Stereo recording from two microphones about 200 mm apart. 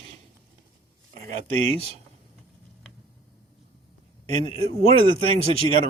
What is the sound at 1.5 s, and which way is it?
Speech, 30° right (ahead or behind).